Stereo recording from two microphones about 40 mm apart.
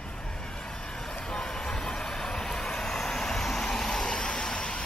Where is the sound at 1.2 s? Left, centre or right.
Centre.